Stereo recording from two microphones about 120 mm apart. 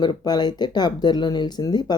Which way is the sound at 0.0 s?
35° left (ahead or behind).